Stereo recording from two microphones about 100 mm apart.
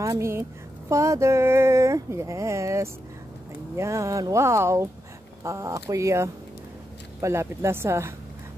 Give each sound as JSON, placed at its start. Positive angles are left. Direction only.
{"t": 0.0, "sound": "speech", "side_deg": -30}